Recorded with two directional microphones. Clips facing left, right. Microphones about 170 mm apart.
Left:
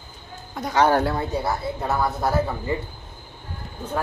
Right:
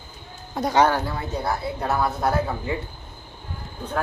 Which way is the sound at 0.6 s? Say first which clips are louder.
Right 5 dB; 30° right (ahead or behind).